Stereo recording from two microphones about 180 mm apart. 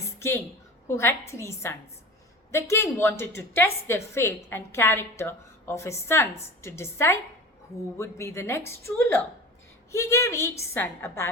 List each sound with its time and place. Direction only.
0.2 s a woman's voice: 15° left (ahead or behind)